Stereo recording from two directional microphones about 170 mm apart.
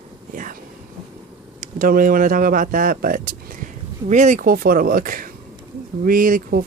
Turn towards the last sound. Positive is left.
turn(degrees=-55)  # may be behind; listen again after turning